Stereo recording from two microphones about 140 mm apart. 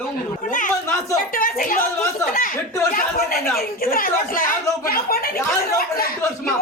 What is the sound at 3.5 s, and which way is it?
A woman's voice, 90° left.